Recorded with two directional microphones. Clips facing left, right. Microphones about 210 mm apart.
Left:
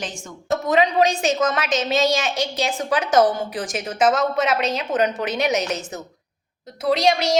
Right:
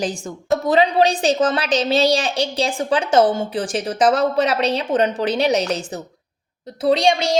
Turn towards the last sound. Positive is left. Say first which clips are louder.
# right 2 dB
turn(degrees=-30)  # may be behind; listen again after turning